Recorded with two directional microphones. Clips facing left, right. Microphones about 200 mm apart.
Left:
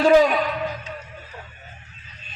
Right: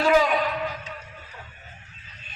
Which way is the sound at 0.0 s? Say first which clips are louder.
Left 5 dB; 40° left (ahead or behind).